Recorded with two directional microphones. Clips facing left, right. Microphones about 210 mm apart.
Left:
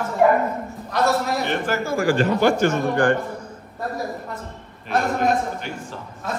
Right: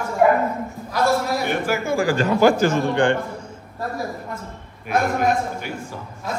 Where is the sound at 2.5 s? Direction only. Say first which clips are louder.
Right 1 dB; 90° right.